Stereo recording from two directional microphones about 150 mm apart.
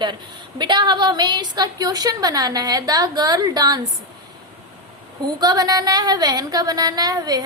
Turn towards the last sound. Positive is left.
turn(degrees=-25)  # may be behind; listen again after turning